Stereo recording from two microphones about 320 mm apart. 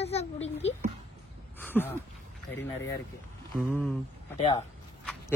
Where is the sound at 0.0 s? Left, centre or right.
Centre.